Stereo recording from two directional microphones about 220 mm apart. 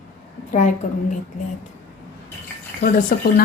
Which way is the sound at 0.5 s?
35° left (ahead or behind).